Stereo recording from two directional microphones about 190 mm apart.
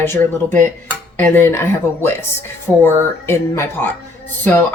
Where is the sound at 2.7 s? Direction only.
5° right (ahead or behind).